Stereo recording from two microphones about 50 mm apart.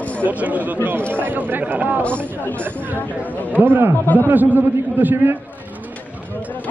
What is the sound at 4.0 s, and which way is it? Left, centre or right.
Speech, left.